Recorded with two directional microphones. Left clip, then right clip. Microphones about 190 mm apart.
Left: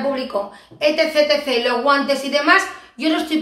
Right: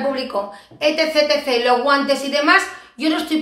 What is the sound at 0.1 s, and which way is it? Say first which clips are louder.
Speech: even; 5° right (ahead or behind).